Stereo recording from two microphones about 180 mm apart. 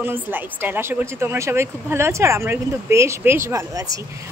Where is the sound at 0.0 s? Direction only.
10° right (ahead or behind).